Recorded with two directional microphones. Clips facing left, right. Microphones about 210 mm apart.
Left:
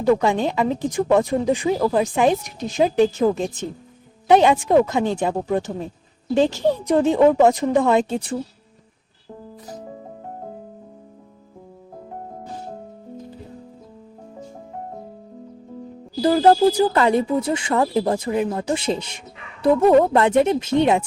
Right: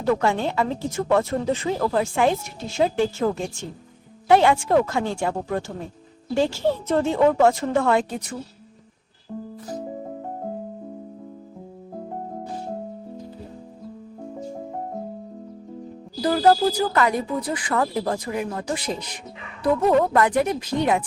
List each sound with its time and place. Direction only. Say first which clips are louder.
0.0 s speech: left 4 dB; 15° left (ahead or behind)
16.2 s speech: left 4 dB; 25° left (ahead or behind)